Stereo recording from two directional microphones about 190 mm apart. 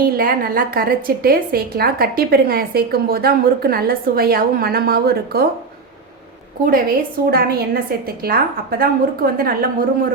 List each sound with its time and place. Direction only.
0.0 s a woman's voice: 50° right (ahead or behind)
6.7 s a woman's voice: 50° right (ahead or behind)